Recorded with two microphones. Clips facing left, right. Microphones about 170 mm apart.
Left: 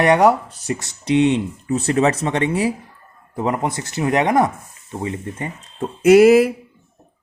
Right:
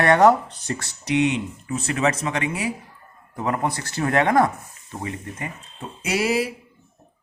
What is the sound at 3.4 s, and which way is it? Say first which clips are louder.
Speech: left 3 dB; 25° left (ahead or behind).